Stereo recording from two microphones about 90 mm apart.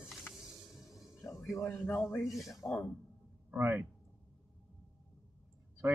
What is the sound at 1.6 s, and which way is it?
Speech, 30° left (ahead or behind).